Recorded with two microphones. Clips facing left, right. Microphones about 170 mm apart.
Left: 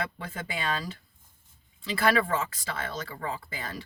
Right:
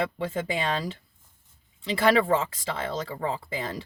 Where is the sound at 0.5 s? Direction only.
25° right (ahead or behind).